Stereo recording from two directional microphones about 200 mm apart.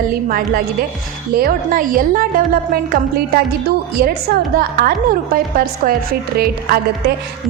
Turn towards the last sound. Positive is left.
turn(degrees=-50)  # may be behind; listen again after turning